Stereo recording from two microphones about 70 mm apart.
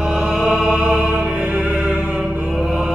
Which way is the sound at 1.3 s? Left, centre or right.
Right.